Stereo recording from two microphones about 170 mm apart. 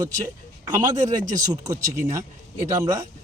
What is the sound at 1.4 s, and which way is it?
A man's voice, 20° right (ahead or behind).